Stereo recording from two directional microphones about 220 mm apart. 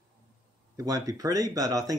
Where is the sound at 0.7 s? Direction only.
15° right (ahead or behind).